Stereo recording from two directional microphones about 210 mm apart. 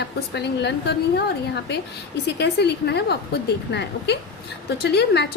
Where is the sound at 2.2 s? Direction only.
55° left (ahead or behind).